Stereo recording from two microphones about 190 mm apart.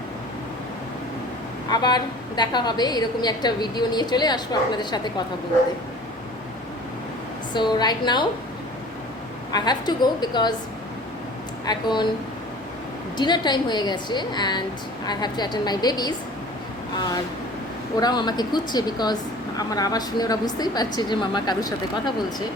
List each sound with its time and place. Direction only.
1.7 s speech: 20° left (ahead or behind)
7.5 s speech: 25° left (ahead or behind)
9.5 s speech: 20° left (ahead or behind)
11.6 s speech: 20° left (ahead or behind)
13.1 s speech: 25° left (ahead or behind)
17.9 s speech: 20° left (ahead or behind)